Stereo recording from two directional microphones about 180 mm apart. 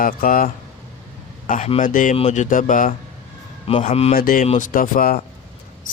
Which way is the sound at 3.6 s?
30° left (ahead or behind).